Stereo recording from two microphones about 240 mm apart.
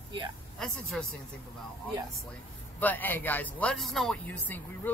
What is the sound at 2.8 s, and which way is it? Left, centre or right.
Speech, centre.